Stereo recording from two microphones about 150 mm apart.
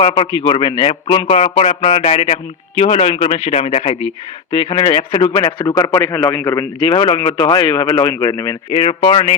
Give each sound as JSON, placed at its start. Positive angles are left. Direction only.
{"t": 0.0, "sound": "a man's voice", "side_deg": 40}
{"t": 6.8, "sound": "speech", "side_deg": 40}